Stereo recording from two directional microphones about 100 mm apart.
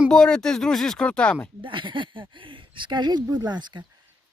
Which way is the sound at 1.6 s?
55° right (ahead or behind).